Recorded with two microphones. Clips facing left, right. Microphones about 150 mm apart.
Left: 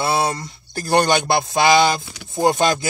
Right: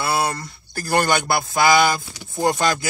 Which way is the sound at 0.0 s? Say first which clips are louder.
Left 2 dB; 20° left (ahead or behind).